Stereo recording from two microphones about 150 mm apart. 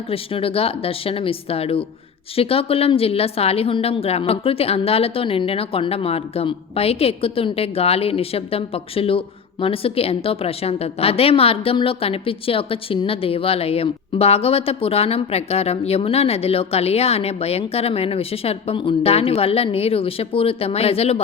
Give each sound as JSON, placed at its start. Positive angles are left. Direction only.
{"t": 0.1, "sound": "a woman's voice", "side_deg": 40}